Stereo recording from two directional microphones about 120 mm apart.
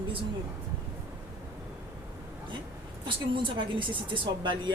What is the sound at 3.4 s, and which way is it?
A woman's voice, 45° right (ahead or behind).